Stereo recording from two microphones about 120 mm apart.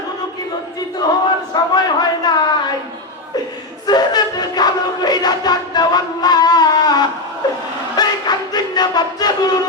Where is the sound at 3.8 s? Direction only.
35° left (ahead or behind).